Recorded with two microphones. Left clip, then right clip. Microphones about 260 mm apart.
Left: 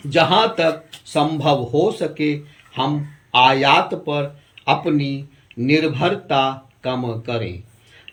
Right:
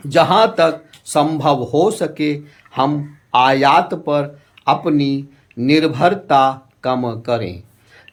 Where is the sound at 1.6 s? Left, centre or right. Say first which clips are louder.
Right 3 dB; right.